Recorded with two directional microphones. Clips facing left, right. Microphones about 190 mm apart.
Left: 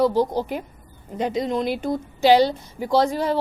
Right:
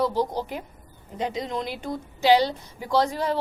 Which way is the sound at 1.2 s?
40° left (ahead or behind).